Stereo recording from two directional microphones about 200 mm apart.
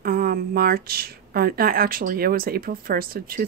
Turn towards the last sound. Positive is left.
turn(degrees=-50)  # may be behind; listen again after turning